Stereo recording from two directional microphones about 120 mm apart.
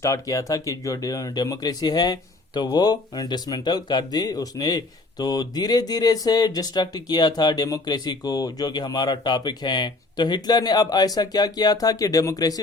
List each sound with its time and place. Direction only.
0.0 s speech: 25° left (ahead or behind)